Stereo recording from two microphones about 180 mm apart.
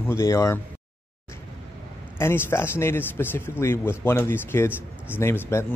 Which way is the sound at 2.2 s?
15° left (ahead or behind).